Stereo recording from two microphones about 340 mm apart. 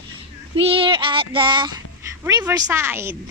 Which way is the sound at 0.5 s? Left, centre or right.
Centre.